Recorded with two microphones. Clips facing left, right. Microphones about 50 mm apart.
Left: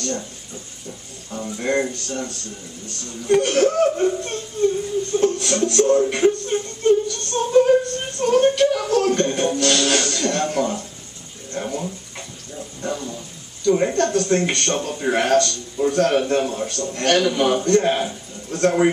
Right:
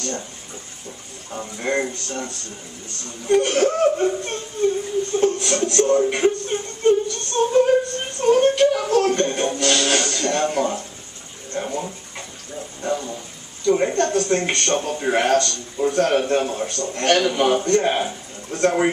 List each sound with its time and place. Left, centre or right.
1.3 s a man's voice: centre
7.3 s a sound: centre
8.9 s a man's voice: centre
11.5 s dog: centre
12.5 s a sound: centre
13.7 s a man's voice: centre